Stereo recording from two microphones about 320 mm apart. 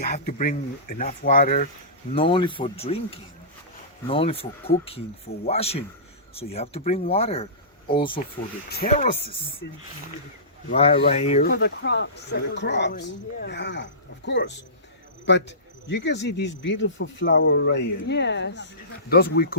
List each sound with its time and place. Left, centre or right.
0.0 s speech: left
4.0 s speech: centre
10.7 s speech: centre
15.9 s speech: left